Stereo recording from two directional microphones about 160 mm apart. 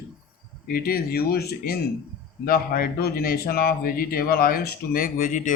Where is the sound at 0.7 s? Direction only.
70° left (ahead or behind).